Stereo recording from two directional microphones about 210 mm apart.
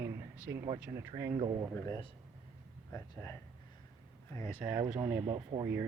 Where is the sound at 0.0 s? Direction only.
15° right (ahead or behind).